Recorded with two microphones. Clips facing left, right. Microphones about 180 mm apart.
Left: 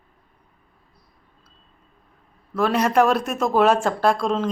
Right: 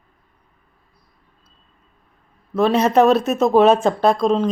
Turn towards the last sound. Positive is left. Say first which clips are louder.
# right 4 dB
turn(degrees=-20)  # may be behind; listen again after turning